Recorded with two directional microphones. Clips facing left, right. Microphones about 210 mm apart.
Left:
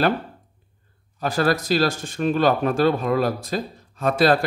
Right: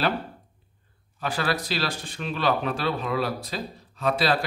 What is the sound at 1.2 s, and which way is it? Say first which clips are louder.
Speech: left 6 dB; 45° left (ahead or behind).